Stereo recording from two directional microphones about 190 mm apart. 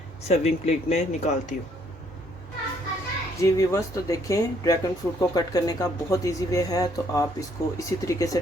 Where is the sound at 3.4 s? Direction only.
15° left (ahead or behind).